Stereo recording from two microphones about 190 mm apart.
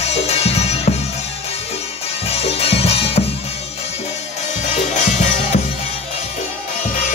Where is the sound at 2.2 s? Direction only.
30° left (ahead or behind).